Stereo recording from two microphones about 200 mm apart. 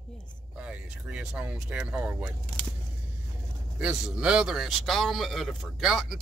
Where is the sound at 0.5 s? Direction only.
5° right (ahead or behind).